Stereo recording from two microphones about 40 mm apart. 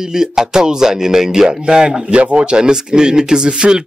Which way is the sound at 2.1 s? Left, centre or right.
Right.